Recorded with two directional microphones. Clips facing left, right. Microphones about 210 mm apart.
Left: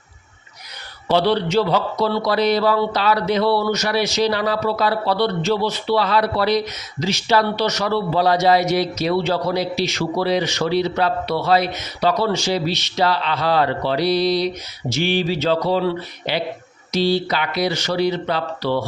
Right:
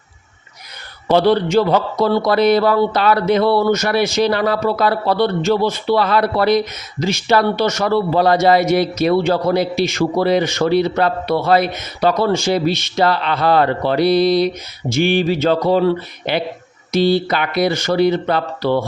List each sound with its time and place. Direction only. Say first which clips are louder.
1.0 s a man's voice: right 4 dB; 50° right (ahead or behind)